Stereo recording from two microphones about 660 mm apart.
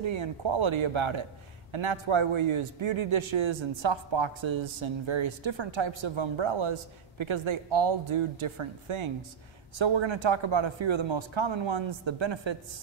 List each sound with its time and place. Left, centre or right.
0.0 s a man's voice: right